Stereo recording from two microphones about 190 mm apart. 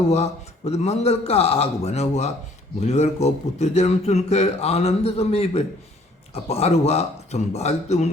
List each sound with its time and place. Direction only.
0.1 s speech: 35° left (ahead or behind)